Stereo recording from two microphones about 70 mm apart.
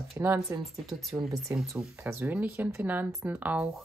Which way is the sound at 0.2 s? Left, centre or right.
Right.